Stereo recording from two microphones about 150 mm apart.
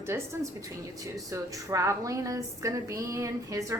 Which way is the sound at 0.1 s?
15° right (ahead or behind).